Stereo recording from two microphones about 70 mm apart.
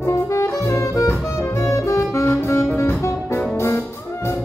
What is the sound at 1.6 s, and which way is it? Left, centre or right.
Saxophone, left.